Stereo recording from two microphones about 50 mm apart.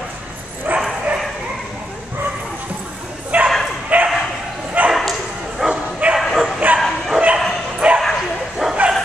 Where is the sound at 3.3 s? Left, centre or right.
Right.